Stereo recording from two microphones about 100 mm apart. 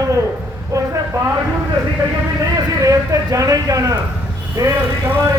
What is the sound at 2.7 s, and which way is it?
A man's voice, 35° right (ahead or behind).